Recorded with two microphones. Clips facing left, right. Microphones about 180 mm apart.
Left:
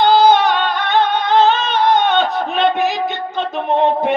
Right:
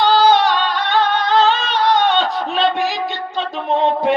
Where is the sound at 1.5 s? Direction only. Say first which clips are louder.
Left 2 dB; 55° left (ahead or behind).